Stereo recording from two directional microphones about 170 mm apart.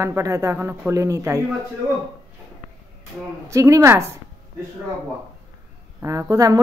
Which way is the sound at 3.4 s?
15° right (ahead or behind).